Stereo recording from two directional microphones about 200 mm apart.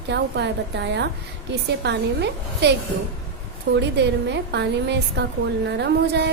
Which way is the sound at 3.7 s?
60° right (ahead or behind).